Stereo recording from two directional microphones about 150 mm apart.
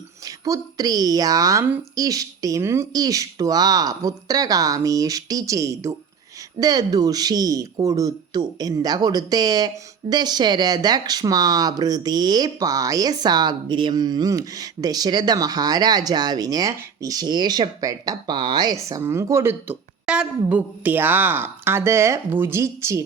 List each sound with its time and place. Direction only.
0.3 s speech: 25° right (ahead or behind)